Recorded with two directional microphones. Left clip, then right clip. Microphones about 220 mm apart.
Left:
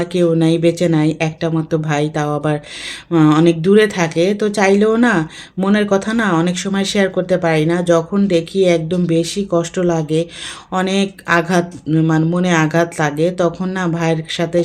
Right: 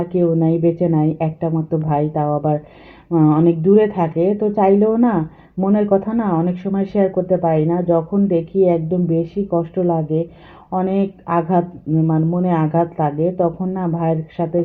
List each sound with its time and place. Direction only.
0.3 s speech: 15° left (ahead or behind)
12.0 s speech: 30° left (ahead or behind)
12.4 s speech: 15° left (ahead or behind)